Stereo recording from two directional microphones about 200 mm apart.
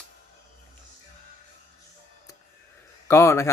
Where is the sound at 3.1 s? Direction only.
15° left (ahead or behind).